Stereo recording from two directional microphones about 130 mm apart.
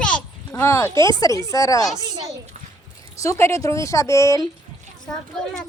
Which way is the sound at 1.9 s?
35° right (ahead or behind).